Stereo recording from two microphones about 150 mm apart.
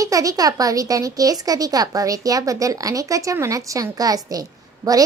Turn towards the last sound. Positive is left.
turn(degrees=-25)  # may be behind; listen again after turning